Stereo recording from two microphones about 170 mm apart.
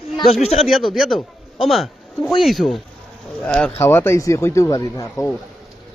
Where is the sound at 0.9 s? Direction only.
Centre (ahead or behind).